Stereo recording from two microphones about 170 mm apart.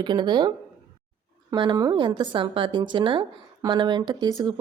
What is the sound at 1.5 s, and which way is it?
A woman's voice, 25° right (ahead or behind).